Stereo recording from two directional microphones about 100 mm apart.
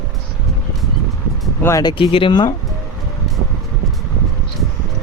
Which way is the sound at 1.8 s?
60° left (ahead or behind).